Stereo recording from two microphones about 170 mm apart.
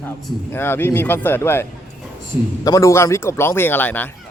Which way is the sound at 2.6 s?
20° left (ahead or behind).